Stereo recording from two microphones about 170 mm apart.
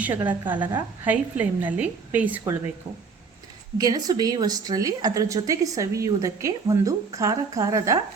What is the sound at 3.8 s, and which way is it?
A woman's voice, 20° right (ahead or behind).